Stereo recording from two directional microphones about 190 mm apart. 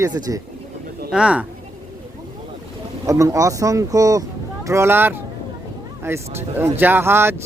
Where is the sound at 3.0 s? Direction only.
15° right (ahead or behind).